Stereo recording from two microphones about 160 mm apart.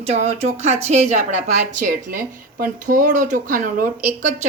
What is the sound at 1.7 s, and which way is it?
Speech, 55° right (ahead or behind).